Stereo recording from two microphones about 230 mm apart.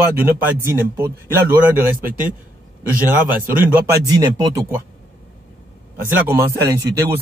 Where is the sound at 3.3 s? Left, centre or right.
Centre.